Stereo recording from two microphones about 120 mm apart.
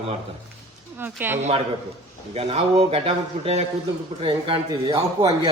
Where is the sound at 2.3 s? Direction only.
55° right (ahead or behind).